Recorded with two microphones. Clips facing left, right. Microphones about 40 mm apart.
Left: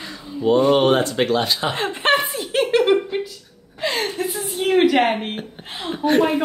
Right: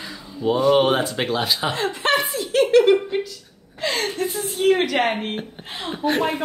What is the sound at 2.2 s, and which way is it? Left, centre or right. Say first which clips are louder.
Laughter: right 1 dB; left.